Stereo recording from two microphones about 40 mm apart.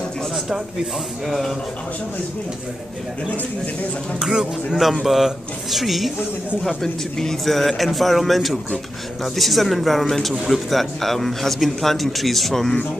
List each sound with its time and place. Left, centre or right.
4.2 s speech: centre
5.0 s a man's voice: centre
6.8 s a man's voice: centre